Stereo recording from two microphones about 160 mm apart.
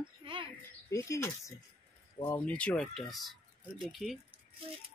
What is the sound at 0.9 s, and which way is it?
Speech, 20° left (ahead or behind).